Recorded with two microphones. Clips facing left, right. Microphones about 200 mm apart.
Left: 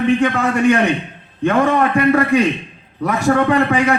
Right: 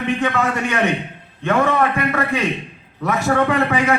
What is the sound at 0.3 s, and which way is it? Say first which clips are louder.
A man's voice: left 6 dB; 35° left (ahead or behind).